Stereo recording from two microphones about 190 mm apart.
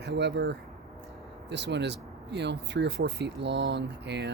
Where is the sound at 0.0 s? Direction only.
65° right (ahead or behind).